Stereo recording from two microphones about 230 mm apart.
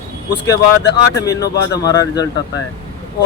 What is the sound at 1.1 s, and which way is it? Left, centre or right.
Speech, centre.